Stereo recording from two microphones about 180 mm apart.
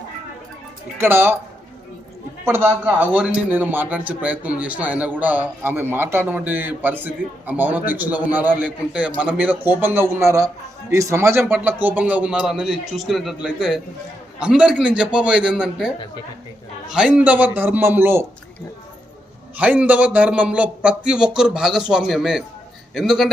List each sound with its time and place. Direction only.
0.9 s a man's voice: 10° right (ahead or behind)
2.4 s a man's voice: 15° right (ahead or behind)
16.9 s a man's voice: 5° right (ahead or behind)
19.5 s a man's voice: 10° right (ahead or behind)